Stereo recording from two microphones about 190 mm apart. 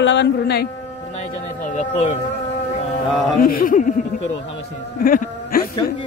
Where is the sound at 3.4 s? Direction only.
45° left (ahead or behind).